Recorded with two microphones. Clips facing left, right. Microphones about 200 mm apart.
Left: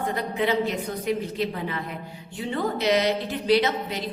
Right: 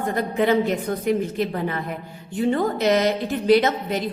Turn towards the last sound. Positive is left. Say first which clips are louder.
# right 4 dB
turn(degrees=-50)  # may be behind; listen again after turning